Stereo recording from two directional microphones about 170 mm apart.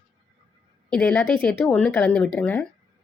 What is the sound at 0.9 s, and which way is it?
Speech, 5° left (ahead or behind).